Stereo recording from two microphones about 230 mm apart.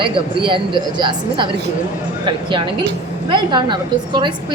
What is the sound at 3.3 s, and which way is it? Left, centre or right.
A woman's voice, centre.